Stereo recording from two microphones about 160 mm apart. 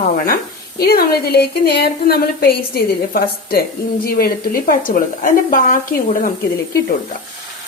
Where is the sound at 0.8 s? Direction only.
75° left (ahead or behind); by 6.3 s 55° left (ahead or behind).